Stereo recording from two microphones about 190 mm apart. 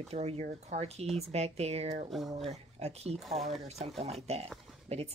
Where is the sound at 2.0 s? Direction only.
Centre (ahead or behind).